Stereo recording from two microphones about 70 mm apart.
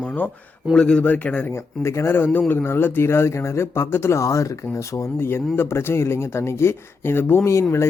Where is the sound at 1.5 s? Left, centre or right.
Left.